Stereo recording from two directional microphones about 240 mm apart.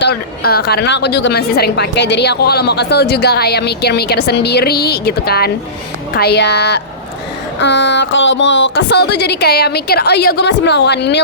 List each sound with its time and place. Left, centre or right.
0.0 s a woman's voice: left